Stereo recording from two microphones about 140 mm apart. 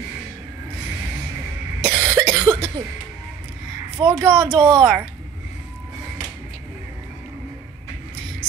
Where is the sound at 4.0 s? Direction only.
35° right (ahead or behind).